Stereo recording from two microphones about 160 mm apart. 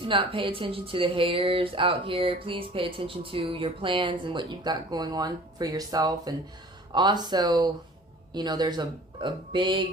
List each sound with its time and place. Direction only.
0.0 s speech: 35° right (ahead or behind)